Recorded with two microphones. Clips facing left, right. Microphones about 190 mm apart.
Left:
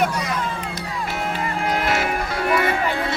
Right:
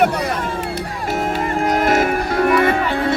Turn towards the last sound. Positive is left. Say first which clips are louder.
# right 5 dB
turn(degrees=-50)  # may be behind; listen again after turning